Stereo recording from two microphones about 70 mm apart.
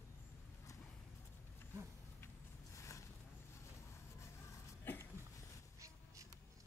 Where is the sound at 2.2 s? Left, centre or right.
Left.